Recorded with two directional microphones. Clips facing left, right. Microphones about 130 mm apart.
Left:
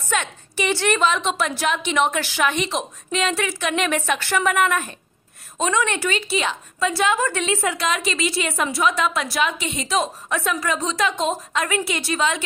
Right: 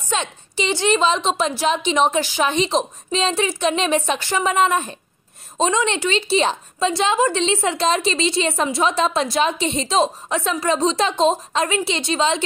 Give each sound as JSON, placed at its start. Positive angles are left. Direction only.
{"t": 0.1, "sound": "a woman's voice", "side_deg": -20}